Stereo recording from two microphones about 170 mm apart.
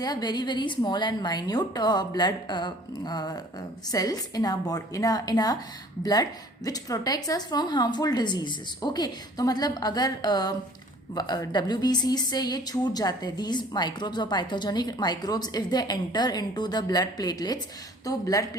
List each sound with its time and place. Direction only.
0.0 s speech: 25° left (ahead or behind)